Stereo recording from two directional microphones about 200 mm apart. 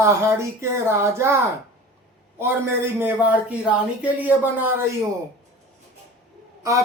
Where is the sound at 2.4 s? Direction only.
10° right (ahead or behind).